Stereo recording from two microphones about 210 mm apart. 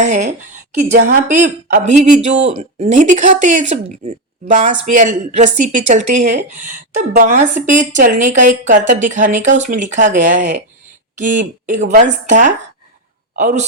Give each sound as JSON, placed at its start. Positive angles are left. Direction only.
{"t": 0.0, "sound": "speech", "side_deg": -35}